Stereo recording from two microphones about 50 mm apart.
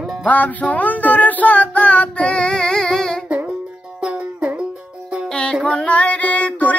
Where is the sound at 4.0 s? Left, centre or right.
Right.